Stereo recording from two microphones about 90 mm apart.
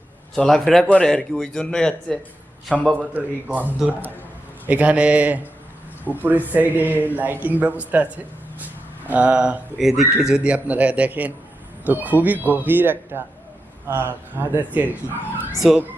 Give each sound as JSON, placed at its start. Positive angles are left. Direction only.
{"t": 0.3, "sound": "a man's voice", "side_deg": 5}
{"t": 2.9, "sound": "a man's voice", "side_deg": -20}
{"t": 9.0, "sound": "a man's voice", "side_deg": -15}
{"t": 9.7, "sound": "a man's voice", "side_deg": 0}